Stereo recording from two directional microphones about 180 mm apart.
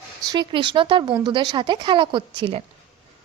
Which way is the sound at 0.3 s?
25° right (ahead or behind).